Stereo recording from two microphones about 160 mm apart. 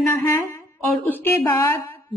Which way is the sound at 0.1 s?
20° left (ahead or behind).